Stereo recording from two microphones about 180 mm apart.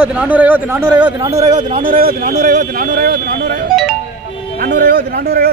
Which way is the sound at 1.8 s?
50° right (ahead or behind).